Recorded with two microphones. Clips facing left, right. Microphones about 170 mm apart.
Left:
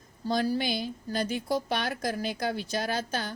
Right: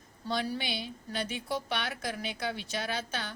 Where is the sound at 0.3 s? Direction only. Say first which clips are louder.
Left 6 dB; 40° left (ahead or behind).